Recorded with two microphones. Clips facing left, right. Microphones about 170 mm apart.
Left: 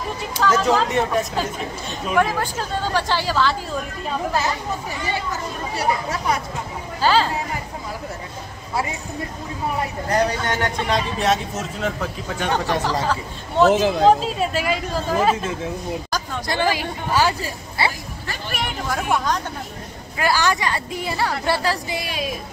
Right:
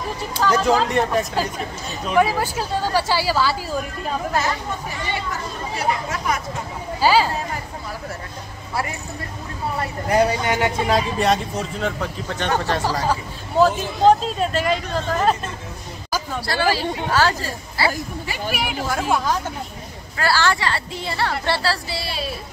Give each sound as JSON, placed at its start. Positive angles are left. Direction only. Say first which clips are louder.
{"t": 0.4, "sound": "speech", "louder": "even", "side_deg": 0}
{"t": 5.8, "sound": "speech", "louder": "left 1 dB", "side_deg": 35}
{"t": 7.0, "sound": "speech", "louder": "right 1 dB", "side_deg": -10}
{"t": 10.0, "sound": "speech", "louder": "right 3 dB", "side_deg": -10}
{"t": 13.7, "sound": "speech", "louder": "left 7 dB", "side_deg": 90}
{"t": 14.0, "sound": "speech", "louder": "right 5 dB", "side_deg": 5}
{"t": 16.4, "sound": "a woman's voice", "louder": "right 1 dB", "side_deg": 15}
{"t": 18.2, "sound": "speech", "louder": "even", "side_deg": -10}
{"t": 20.2, "sound": "a woman's voice", "louder": "even", "side_deg": 15}